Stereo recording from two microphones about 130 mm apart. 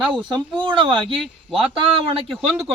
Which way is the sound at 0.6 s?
40° right (ahead or behind).